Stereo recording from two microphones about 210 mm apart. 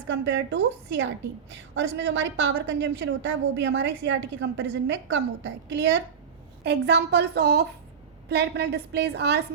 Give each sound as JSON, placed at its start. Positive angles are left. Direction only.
{"t": 0.1, "sound": "a woman's voice", "side_deg": -60}